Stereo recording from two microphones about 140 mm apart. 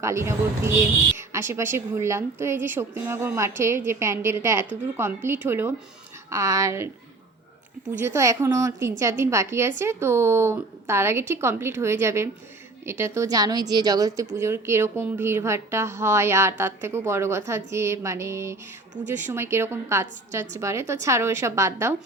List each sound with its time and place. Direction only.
0.0 s a woman's voice: 20° right (ahead or behind)
8.0 s a woman's voice: 20° right (ahead or behind)